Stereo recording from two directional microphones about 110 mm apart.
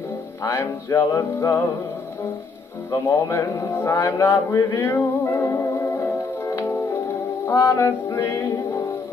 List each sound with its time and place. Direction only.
0.4 s speech: 30° left (ahead or behind)
2.9 s speech: 25° left (ahead or behind)
4.9 s music: 15° left (ahead or behind)
6.4 s music: 30° left (ahead or behind)
7.7 s speech: 20° left (ahead or behind)